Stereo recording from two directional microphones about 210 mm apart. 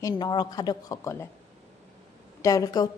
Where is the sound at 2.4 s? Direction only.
15° left (ahead or behind).